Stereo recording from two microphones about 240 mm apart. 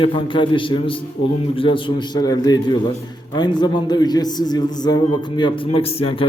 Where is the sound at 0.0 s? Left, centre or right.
Left.